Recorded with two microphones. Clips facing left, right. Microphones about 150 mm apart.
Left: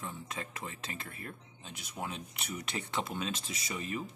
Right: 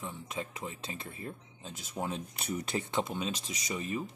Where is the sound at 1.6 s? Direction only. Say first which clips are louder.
Right 4 dB; 35° right (ahead or behind).